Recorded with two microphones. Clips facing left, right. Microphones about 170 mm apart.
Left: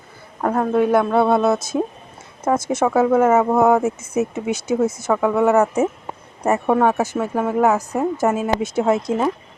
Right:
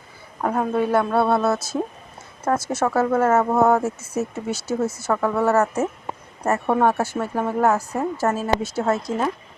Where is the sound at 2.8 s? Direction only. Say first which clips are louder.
Left 5 dB; 10° left (ahead or behind).